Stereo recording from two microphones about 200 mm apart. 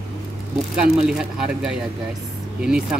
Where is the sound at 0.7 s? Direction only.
5° right (ahead or behind).